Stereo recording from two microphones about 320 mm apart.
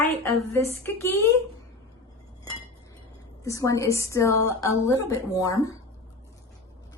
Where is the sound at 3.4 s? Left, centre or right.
Centre.